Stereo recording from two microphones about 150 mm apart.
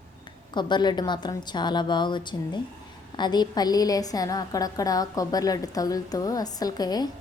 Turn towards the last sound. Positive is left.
turn(degrees=25)  # may be behind; listen again after turning